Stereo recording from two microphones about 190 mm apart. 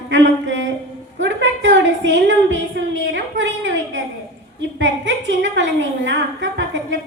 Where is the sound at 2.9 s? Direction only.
70° right (ahead or behind).